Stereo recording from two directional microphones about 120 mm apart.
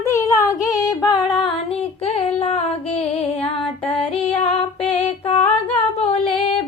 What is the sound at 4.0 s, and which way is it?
Female singing, 50° left (ahead or behind).